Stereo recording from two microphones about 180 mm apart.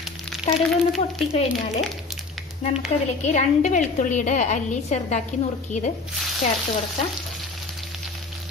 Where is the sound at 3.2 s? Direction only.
40° left (ahead or behind).